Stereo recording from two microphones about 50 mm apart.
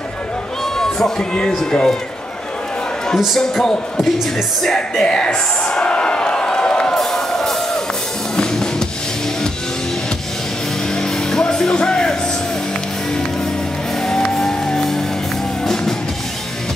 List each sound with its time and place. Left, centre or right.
0.7 s speech: centre
3.3 s speech: centre
4.6 s a sound: centre
7.0 s music: centre
11.0 s music: centre
14.0 s music: centre